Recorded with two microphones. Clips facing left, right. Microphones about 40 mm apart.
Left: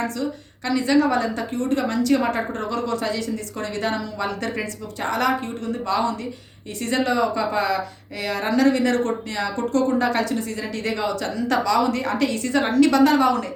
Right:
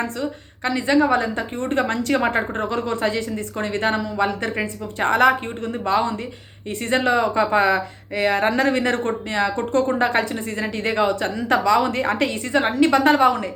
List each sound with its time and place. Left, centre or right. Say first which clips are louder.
0.0 s a woman's voice: even; right